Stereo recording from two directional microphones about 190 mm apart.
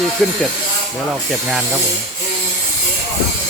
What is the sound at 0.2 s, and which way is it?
Speech, 5° left (ahead or behind).